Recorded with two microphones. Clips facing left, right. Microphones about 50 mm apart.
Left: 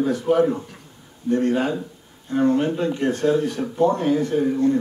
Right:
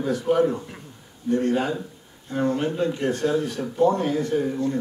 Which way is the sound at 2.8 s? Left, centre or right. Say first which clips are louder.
Left 3 dB; left.